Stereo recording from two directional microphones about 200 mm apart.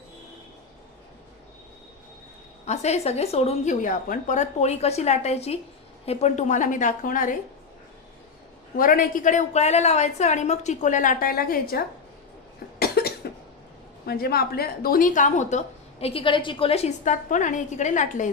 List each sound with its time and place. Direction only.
2.6 s a woman's voice: 35° left (ahead or behind)
8.7 s a woman's voice: 45° left (ahead or behind)
12.8 s cough: 50° left (ahead or behind)
14.0 s a woman's voice: 50° left (ahead or behind)